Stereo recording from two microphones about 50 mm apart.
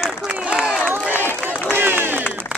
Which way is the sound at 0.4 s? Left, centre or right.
Centre.